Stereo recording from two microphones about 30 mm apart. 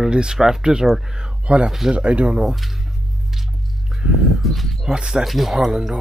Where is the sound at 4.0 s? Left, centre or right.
Right.